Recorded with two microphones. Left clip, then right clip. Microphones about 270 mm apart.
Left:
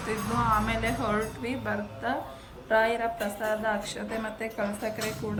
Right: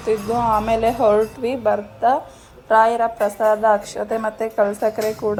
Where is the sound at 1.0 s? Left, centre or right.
Right.